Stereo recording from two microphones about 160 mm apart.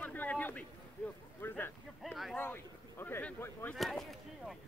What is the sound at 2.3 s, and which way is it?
Speech, 15° left (ahead or behind).